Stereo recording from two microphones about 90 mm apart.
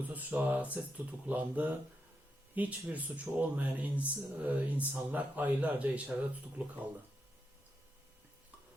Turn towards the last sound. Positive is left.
turn(degrees=-20)  # may be behind; listen again after turning